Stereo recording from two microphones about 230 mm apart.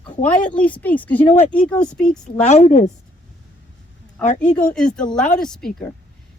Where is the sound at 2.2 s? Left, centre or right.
Left.